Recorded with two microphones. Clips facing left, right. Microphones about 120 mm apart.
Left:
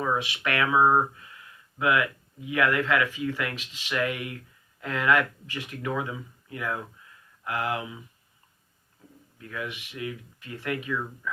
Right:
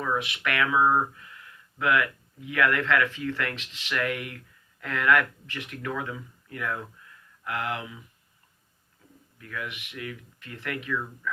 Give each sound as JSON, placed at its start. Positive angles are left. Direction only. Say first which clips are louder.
{"t": 0.0, "sound": "a sound", "louder": "left 1 dB", "side_deg": 20}
{"t": 0.4, "sound": "speech", "louder": "left 2 dB", "side_deg": 25}
{"t": 9.4, "sound": "speech", "louder": "left 2 dB", "side_deg": 25}